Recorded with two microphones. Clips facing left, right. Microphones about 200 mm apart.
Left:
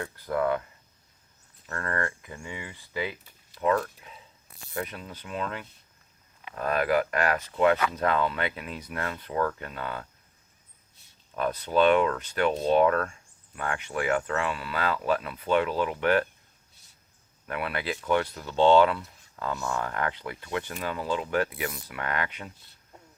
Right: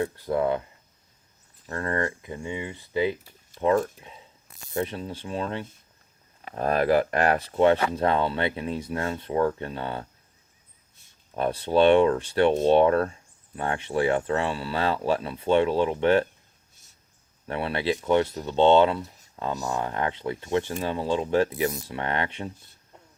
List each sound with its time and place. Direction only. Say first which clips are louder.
0.0 s speech: right 3 dB; 25° right (ahead or behind)
3.5 s speech: right 3 dB; 50° right (ahead or behind)
4.0 s speech: right 2 dB; 25° right (ahead or behind)
11.3 s speech: right 3 dB; 30° right (ahead or behind)
17.5 s speech: right 5 dB; 25° right (ahead or behind)